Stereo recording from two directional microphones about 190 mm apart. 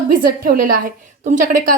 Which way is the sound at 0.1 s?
50° right (ahead or behind).